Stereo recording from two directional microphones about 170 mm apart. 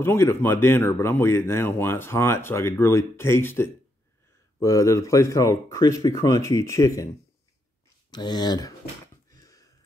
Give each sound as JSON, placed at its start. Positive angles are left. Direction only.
{"t": 0.0, "sound": "speech", "side_deg": 15}
{"t": 8.1, "sound": "speech", "side_deg": 25}
{"t": 9.3, "sound": "sniff", "side_deg": 20}